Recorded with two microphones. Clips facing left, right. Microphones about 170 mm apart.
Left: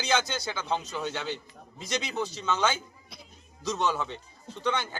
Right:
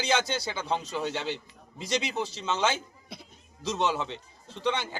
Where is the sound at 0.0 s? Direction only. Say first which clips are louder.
Right 1 dB; 30° right (ahead or behind).